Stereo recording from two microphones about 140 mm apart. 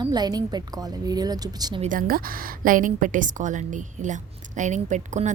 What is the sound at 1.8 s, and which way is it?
A woman's voice, 80° right.